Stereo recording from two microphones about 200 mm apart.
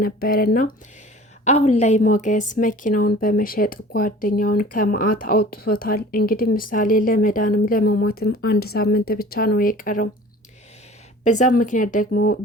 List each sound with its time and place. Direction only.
0.0 s a woman's voice: 50° left (ahead or behind)
1.5 s a woman's voice: 35° left (ahead or behind)
11.2 s speech: 35° left (ahead or behind)